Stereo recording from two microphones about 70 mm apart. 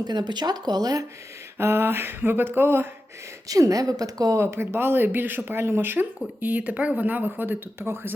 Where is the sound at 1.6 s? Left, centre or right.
Right.